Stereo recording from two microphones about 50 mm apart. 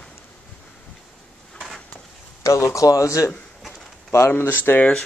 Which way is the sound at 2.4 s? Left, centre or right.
Left.